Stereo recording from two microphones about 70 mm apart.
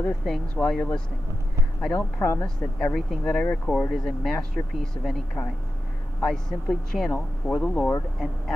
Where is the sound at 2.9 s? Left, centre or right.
Centre.